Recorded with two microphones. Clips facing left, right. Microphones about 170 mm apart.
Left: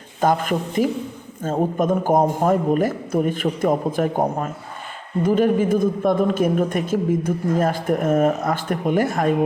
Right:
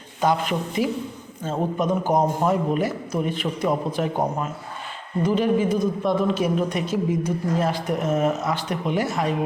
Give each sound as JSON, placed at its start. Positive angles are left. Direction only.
{"t": 0.2, "sound": "a woman's voice", "side_deg": 50}
{"t": 5.2, "sound": "a woman's voice", "side_deg": 50}